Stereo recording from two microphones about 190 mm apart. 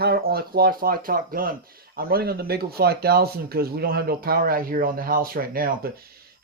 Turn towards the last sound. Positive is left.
turn(degrees=-50)  # may be behind; listen again after turning